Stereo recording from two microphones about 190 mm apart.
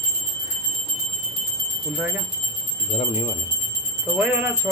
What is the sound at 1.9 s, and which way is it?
Speech, 10° right (ahead or behind).